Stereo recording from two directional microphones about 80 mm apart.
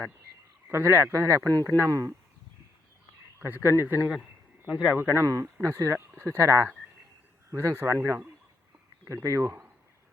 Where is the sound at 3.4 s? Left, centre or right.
Right.